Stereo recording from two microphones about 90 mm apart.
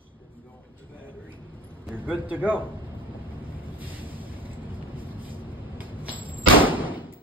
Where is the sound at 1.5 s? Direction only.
20° right (ahead or behind).